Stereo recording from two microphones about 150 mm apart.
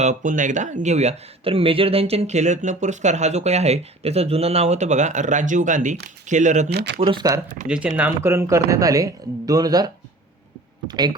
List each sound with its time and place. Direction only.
0.0 s speech: 55° right (ahead or behind)
6.7 s speech: 90° right
7.0 s speech: 30° right (ahead or behind)
7.7 s speech: 5° right (ahead or behind); by 11.2 s 30° right (ahead or behind)